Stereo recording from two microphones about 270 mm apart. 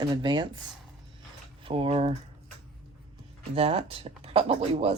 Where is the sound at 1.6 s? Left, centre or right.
Centre.